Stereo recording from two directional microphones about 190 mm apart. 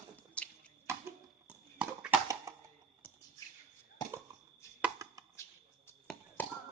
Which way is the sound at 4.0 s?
20° left (ahead or behind).